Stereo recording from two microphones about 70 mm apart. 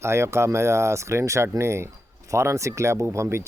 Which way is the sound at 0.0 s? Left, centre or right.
Right.